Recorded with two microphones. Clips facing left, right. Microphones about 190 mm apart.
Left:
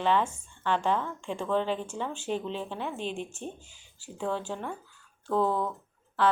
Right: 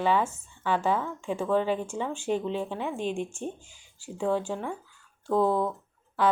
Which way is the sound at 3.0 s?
45° right (ahead or behind).